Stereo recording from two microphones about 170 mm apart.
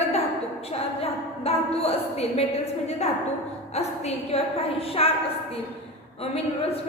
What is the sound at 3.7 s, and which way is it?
A woman's voice, 40° left (ahead or behind).